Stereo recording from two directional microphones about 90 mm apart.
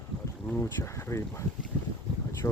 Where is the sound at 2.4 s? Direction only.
30° left (ahead or behind).